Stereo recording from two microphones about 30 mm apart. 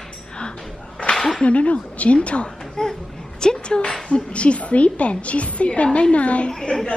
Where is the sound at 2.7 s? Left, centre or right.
Left.